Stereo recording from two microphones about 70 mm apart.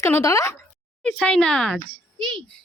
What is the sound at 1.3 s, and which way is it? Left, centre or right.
Speech, centre.